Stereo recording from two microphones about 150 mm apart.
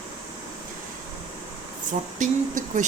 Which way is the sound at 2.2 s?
55° right (ahead or behind).